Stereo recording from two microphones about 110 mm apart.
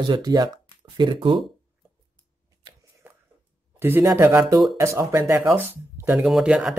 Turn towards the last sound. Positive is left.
turn(degrees=-5)  # may be behind; listen again after turning